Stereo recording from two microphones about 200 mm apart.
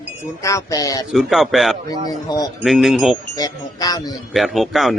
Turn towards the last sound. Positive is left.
turn(degrees=0)  # may be behind; listen again after turning